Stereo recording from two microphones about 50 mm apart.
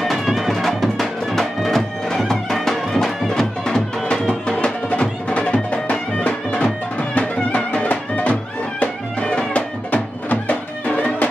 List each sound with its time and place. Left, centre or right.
0.0 s music: centre; by 11.2 s left